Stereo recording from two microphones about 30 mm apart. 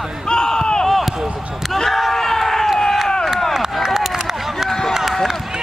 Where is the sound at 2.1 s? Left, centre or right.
Centre.